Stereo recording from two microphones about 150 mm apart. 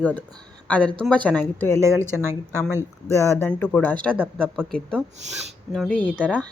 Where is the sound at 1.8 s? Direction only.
20° right (ahead or behind).